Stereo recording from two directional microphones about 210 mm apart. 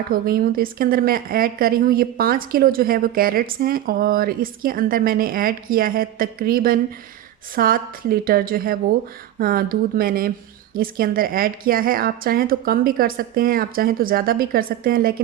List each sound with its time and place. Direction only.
0.1 s a woman's voice: 45° right (ahead or behind)